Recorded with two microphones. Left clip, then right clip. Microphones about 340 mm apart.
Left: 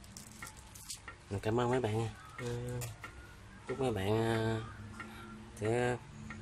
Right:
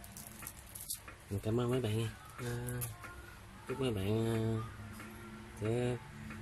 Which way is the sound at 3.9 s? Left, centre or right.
Left.